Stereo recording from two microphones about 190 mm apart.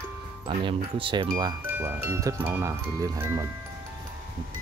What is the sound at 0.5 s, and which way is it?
Speech, 25° right (ahead or behind).